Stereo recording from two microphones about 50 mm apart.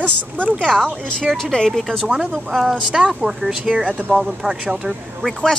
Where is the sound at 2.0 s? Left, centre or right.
Centre.